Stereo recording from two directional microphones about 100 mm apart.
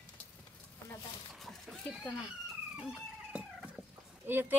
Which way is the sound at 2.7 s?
10° right (ahead or behind).